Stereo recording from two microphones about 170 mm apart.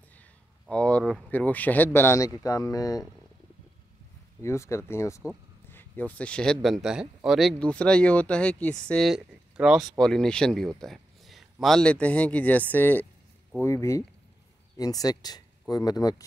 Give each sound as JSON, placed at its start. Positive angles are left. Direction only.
{"t": 0.2, "sound": "speech", "side_deg": 5}
{"t": 4.4, "sound": "speech", "side_deg": 15}